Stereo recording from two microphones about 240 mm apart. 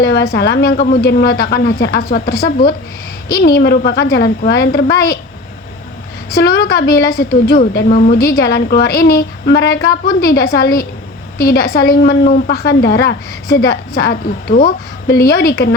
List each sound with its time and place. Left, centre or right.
0.0 s a woman's voice: left
6.3 s a woman's voice: left